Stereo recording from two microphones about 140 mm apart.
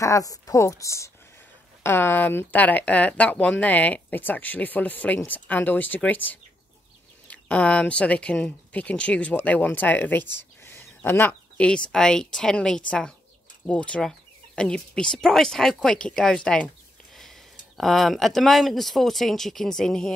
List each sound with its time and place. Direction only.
0.0 s a woman's voice: 25° left (ahead or behind); by 20.2 s 5° left (ahead or behind)